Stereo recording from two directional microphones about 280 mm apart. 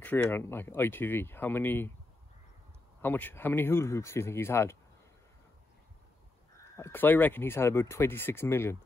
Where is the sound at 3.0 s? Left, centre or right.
Centre.